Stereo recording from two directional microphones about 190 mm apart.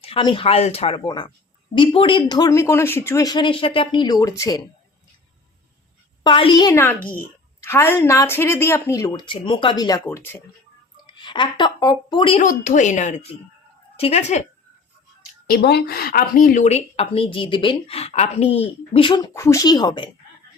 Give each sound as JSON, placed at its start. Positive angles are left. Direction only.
{"t": 0.0, "sound": "speech", "side_deg": 25}
{"t": 6.2, "sound": "a woman's voice", "side_deg": 25}
{"t": 12.4, "sound": "a woman's voice", "side_deg": 40}
{"t": 15.4, "sound": "a woman's voice", "side_deg": 55}